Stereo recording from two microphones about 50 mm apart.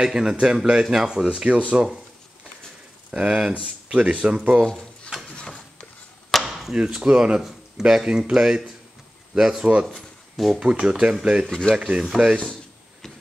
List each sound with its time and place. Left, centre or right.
0.0 s speech: centre
3.1 s speech: centre
5.3 s a sound: centre
6.3 s chop: centre
6.7 s speech: centre
9.9 s a sound: centre
10.6 s speech: right
11.4 s speech: centre
11.8 s speech: centre